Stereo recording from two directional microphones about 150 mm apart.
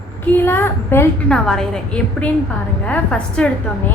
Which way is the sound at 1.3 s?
5° left (ahead or behind).